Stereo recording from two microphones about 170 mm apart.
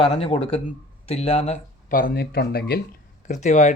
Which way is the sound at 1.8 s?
55° left (ahead or behind).